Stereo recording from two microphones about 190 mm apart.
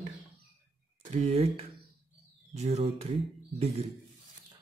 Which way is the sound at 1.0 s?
40° right (ahead or behind).